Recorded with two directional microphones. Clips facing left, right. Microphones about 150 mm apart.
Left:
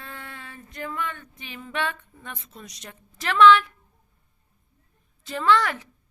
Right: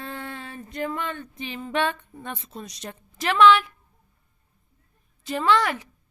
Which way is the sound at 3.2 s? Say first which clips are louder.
Left 1 dB; 15° right (ahead or behind).